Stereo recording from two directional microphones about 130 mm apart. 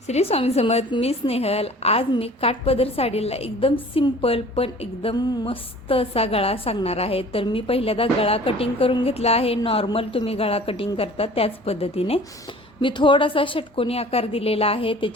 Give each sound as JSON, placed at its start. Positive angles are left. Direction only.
{"t": 0.1, "sound": "a woman's voice", "side_deg": 50}
{"t": 5.1, "sound": "a sound", "side_deg": 30}
{"t": 5.9, "sound": "a woman's voice", "side_deg": 50}
{"t": 12.8, "sound": "a woman's voice", "side_deg": 40}